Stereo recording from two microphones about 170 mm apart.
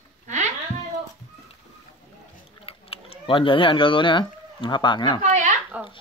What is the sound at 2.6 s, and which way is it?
Speech, 35° left (ahead or behind).